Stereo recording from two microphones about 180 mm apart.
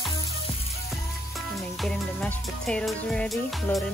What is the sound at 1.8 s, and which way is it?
Music, 5° left (ahead or behind).